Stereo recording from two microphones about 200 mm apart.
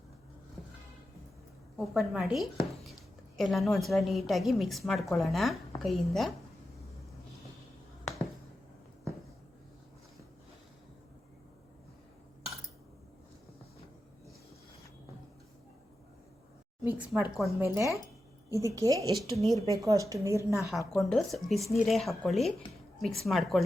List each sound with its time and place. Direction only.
1.8 s a woman's voice: centre (ahead or behind)
16.8 s a sound: 5° right (ahead or behind)
17.3 s a woman's voice: centre (ahead or behind)
18.5 s a woman's voice: 15° right (ahead or behind)
19.1 s a woman's voice: centre (ahead or behind)
19.5 s speech: 15° left (ahead or behind)
19.8 s a woman's voice: 15° right (ahead or behind)
20.7 s a woman's voice: centre (ahead or behind)